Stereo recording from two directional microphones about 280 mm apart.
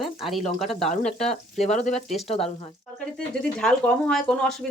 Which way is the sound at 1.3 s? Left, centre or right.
Left.